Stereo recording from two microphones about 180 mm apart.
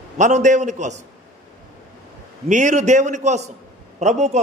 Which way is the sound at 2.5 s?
45° right (ahead or behind).